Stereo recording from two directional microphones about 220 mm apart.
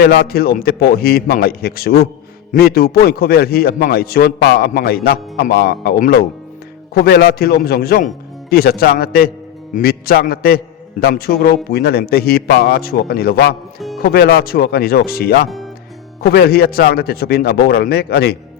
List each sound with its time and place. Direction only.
0.0 s a man's voice: 45° left (ahead or behind)